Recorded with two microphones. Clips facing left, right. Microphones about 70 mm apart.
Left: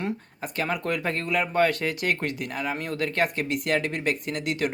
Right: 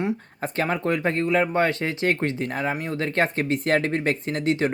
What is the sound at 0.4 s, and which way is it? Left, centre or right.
Speech, right.